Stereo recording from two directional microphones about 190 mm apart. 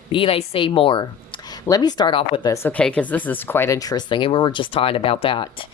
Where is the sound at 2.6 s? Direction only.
5° left (ahead or behind); by 5.6 s 25° left (ahead or behind).